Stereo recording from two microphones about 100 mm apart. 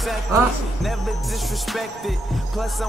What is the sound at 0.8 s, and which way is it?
Music, centre (ahead or behind).